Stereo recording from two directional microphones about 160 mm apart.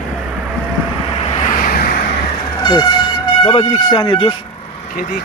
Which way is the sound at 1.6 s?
65° left (ahead or behind).